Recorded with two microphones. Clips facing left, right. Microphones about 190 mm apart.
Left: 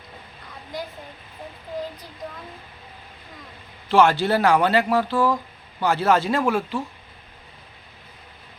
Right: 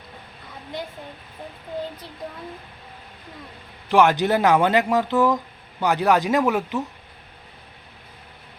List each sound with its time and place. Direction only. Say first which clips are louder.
3.8 s speech: even; 15° right (ahead or behind)